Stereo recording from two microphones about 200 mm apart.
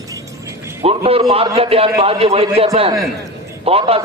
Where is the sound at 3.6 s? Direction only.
30° right (ahead or behind).